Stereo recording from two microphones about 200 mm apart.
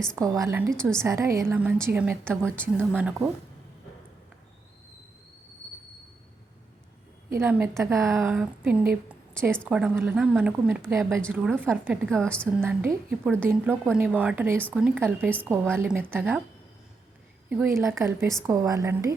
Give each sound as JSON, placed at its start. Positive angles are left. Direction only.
{"t": 0.2, "sound": "a woman's voice", "side_deg": -15}
{"t": 0.8, "sound": "a woman's voice", "side_deg": 5}
{"t": 1.0, "sound": "a woman's voice", "side_deg": -15}
{"t": 7.3, "sound": "a woman's voice", "side_deg": -10}
{"t": 12.0, "sound": "a woman's voice", "side_deg": 5}
{"t": 12.5, "sound": "a woman's voice", "side_deg": -10}
{"t": 17.5, "sound": "a woman's voice", "side_deg": -10}